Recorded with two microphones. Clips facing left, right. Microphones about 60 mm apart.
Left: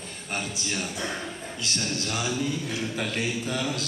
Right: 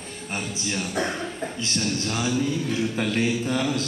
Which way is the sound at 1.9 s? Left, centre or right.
Right.